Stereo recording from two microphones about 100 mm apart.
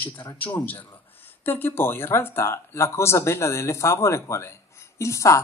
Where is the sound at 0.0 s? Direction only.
20° left (ahead or behind).